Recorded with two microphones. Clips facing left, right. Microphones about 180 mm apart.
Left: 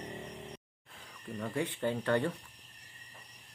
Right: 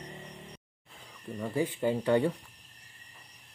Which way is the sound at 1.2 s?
5° right (ahead or behind).